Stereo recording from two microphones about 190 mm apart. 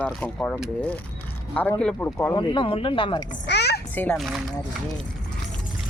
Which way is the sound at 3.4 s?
60° left (ahead or behind).